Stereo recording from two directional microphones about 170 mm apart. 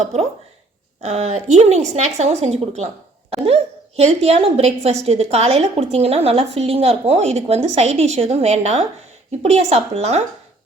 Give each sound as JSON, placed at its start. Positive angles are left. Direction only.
{"t": 0.0, "sound": "a woman's voice", "side_deg": -40}